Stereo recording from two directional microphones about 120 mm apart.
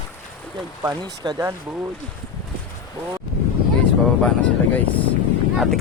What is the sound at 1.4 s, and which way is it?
Speech, 20° right (ahead or behind).